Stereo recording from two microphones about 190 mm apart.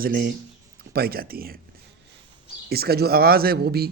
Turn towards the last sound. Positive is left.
turn(degrees=-55)  # may be behind; listen again after turning